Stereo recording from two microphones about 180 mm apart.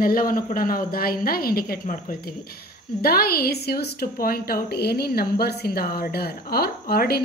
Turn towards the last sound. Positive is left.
turn(degrees=60)  # may be behind; listen again after turning